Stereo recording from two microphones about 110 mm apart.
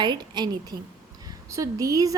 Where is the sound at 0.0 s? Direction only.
40° right (ahead or behind).